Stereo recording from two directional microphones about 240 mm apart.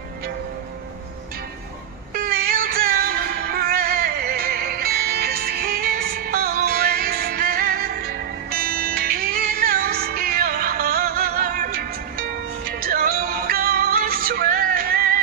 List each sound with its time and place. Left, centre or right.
2.1 s music: right